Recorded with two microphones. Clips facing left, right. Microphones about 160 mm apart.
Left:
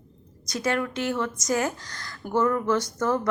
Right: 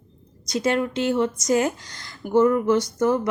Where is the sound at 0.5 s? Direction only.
20° right (ahead or behind).